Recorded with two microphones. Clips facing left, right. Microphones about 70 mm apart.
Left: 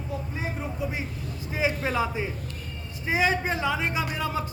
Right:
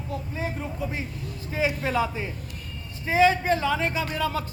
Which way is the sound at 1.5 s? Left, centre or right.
Centre.